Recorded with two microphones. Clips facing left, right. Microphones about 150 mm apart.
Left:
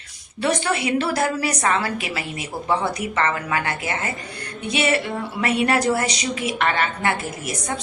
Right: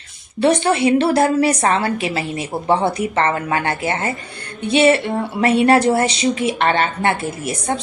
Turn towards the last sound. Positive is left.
turn(degrees=-30)  # may be behind; listen again after turning